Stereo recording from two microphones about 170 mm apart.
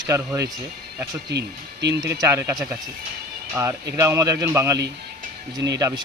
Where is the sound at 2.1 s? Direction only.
15° right (ahead or behind).